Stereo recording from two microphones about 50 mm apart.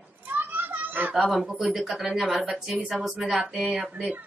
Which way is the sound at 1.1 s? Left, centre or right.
Centre.